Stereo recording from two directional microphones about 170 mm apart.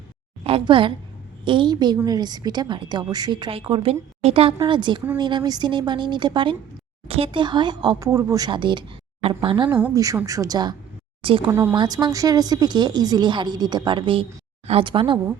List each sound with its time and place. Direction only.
0.4 s a woman's voice: 35° right (ahead or behind)
9.7 s speech: 15° right (ahead or behind); by 15.2 s 30° right (ahead or behind)